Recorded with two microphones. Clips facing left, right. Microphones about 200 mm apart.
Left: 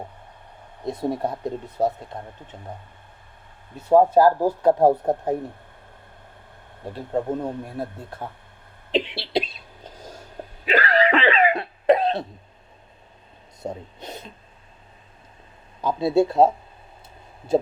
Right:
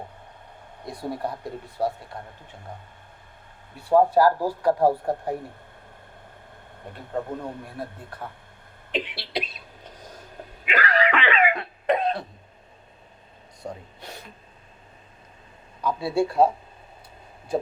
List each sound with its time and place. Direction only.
0.9 s speech: 25° left (ahead or behind)
3.8 s speech: 20° left (ahead or behind)
6.9 s speech: 25° left (ahead or behind)
8.9 s a sound: 25° left (ahead or behind)
10.7 s cough: 30° left (ahead or behind)
13.6 s a sound: 20° left (ahead or behind)
15.8 s speech: 20° left (ahead or behind)